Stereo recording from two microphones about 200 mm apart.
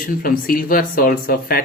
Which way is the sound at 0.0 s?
45° left (ahead or behind).